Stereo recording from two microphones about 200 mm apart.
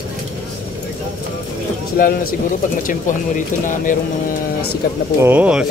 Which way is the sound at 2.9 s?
40° left (ahead or behind).